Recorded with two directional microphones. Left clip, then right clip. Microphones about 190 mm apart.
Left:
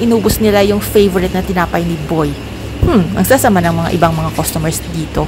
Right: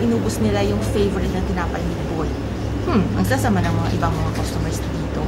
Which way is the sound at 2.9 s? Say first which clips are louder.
Left 8 dB; 35° left (ahead or behind).